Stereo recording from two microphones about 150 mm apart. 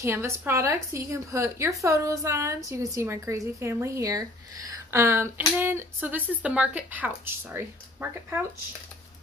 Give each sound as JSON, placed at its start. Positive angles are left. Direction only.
{"t": 0.0, "sound": "a woman's voice", "side_deg": -15}